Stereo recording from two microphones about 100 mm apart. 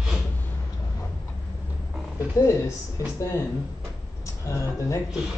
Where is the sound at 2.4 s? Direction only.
30° left (ahead or behind).